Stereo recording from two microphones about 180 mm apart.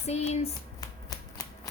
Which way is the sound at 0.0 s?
35° left (ahead or behind).